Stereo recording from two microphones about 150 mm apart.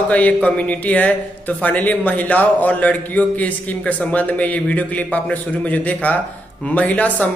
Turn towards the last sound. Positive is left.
turn(degrees=10)  # may be behind; listen again after turning